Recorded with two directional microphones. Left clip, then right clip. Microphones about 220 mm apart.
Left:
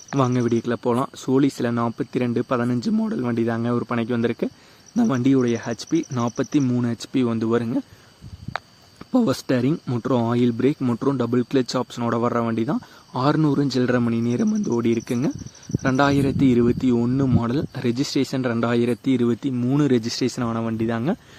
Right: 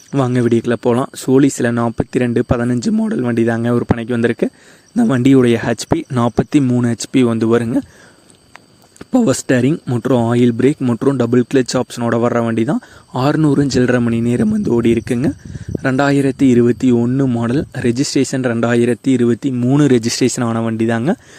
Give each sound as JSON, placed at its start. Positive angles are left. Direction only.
{"t": 0.1, "sound": "speech", "side_deg": -30}
{"t": 9.1, "sound": "speech", "side_deg": -30}